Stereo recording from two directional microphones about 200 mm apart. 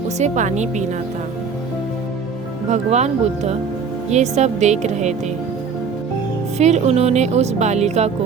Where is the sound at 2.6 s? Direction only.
35° right (ahead or behind).